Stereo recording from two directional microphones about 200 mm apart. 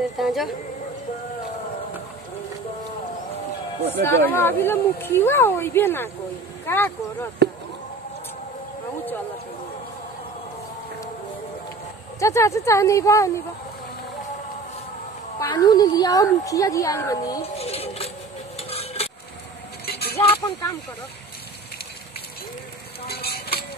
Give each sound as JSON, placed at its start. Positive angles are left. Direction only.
{"t": 0.2, "sound": "speech", "side_deg": 0}
{"t": 3.8, "sound": "speech", "side_deg": 10}
{"t": 12.2, "sound": "speech", "side_deg": 15}
{"t": 15.3, "sound": "speech", "side_deg": 20}
{"t": 17.6, "sound": "music", "side_deg": 30}
{"t": 18.6, "sound": "stir", "side_deg": 30}
{"t": 19.9, "sound": "keys jangling", "side_deg": 50}
{"t": 23.0, "sound": "a sound", "side_deg": 50}